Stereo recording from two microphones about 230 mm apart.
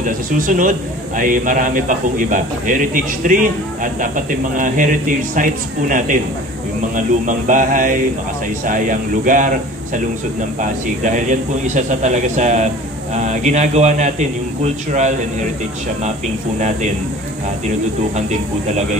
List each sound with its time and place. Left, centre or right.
0.5 s a man's voice: right
7.2 s a man's voice: right
10.6 s a man's voice: right